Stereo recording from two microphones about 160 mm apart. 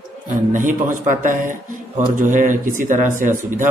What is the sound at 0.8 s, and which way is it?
Speech, 55° right (ahead or behind).